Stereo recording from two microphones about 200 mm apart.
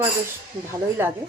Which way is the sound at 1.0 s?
10° right (ahead or behind).